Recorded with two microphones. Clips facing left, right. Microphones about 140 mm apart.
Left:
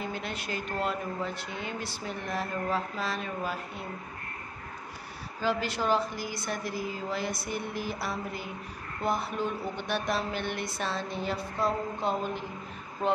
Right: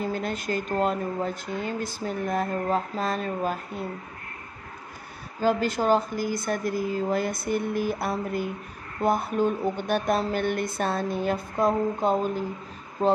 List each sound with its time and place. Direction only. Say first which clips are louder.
0.0 s speech: right 7 dB; 45° right (ahead or behind)
5.4 s speech: right 6 dB; 45° right (ahead or behind)
13.0 s speech: right 6 dB; 30° right (ahead or behind)